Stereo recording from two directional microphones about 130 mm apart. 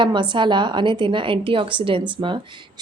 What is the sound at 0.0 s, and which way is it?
Speech, 35° right (ahead or behind).